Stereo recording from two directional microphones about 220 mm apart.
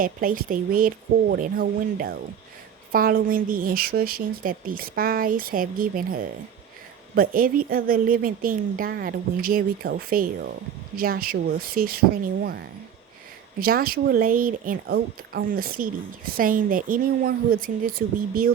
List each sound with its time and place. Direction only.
0.0 s a woman's voice: 40° right (ahead or behind)
13.6 s a woman's voice: 40° right (ahead or behind)